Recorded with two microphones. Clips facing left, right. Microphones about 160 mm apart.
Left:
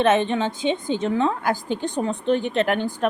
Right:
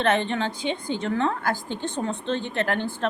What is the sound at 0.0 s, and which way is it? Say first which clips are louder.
A woman's voice: left 4 dB; 20° left (ahead or behind).